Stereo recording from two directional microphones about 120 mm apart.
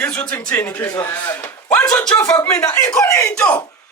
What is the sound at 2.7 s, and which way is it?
Speech, 25° left (ahead or behind).